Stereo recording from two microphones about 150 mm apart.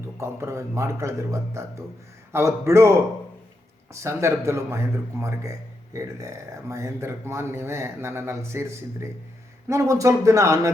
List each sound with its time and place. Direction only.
0.2 s speech: 20° right (ahead or behind)